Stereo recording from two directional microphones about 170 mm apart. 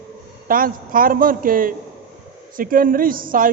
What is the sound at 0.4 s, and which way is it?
A woman's voice, 55° right (ahead or behind).